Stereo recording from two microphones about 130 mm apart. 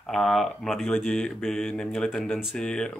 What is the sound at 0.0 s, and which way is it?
Speech, 5° left (ahead or behind).